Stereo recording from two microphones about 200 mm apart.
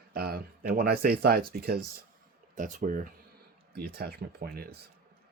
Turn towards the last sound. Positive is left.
turn(degrees=-50)  # may be behind; listen again after turning